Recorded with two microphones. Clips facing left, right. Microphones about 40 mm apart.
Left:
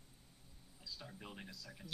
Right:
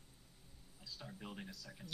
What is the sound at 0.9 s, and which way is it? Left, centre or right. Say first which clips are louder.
Speech: right 2 dB; centre.